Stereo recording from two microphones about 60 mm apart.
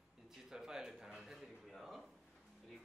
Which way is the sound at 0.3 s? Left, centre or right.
Centre.